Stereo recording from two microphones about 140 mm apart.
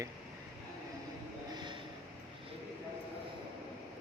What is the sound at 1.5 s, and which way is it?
Vehicle, 35° right (ahead or behind).